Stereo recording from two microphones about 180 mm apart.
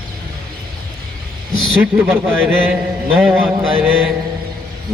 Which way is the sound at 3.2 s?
5° right (ahead or behind).